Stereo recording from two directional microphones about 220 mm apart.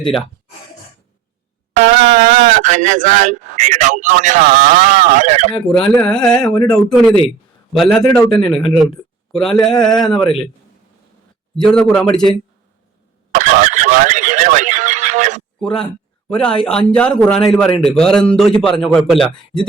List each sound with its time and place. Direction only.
1.7 s speech: 35° right (ahead or behind)
5.9 s speech: 5° left (ahead or behind)
10.2 s speech: 25° left (ahead or behind)
11.5 s speech: 5° left (ahead or behind)
13.3 s a sound: 35° right (ahead or behind)
15.6 s speech: 5° left (ahead or behind)